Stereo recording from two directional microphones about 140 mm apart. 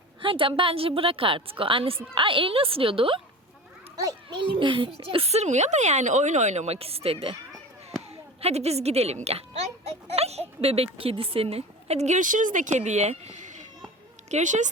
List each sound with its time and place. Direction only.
0.2 s a woman's voice: 35° right (ahead or behind)
3.9 s a child's voice: 30° right (ahead or behind); by 14.7 s 60° right (ahead or behind)